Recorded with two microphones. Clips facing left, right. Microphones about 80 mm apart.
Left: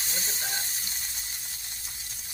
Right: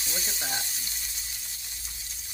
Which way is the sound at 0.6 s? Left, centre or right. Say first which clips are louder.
Even; left.